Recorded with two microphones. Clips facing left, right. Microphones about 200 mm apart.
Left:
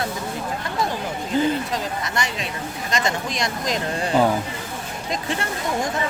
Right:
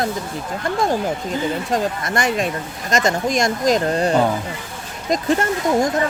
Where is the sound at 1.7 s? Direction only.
50° right (ahead or behind).